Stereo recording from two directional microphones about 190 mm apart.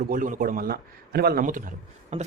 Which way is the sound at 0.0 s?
45° right (ahead or behind).